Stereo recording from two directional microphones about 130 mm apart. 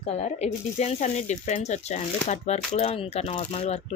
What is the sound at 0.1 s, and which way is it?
Speech, 55° left (ahead or behind).